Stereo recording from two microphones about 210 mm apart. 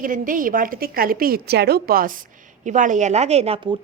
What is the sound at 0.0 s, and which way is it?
A woman's voice, 40° right (ahead or behind).